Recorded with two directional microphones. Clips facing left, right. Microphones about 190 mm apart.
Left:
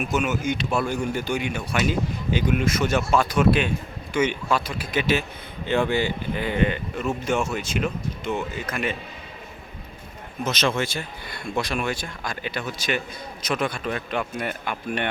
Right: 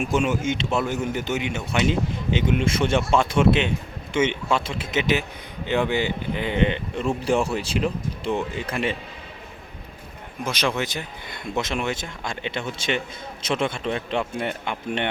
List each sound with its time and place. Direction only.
0.0 s speech: 30° right (ahead or behind)
10.4 s speech: 10° right (ahead or behind)